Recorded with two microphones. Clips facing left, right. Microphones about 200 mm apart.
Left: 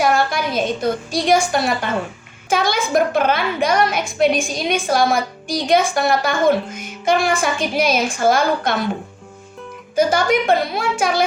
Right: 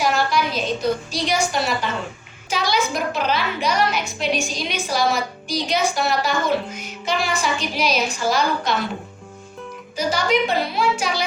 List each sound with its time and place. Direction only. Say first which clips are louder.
0.0 s a woman's voice: left 3 dB; 50° left (ahead or behind)
9.9 s a woman's voice: left 5 dB; 50° left (ahead or behind)